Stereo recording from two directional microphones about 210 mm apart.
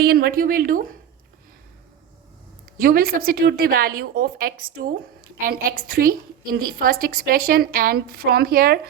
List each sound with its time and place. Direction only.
0.0 s a woman's voice: 45° right (ahead or behind)
2.8 s a woman's voice: 45° right (ahead or behind)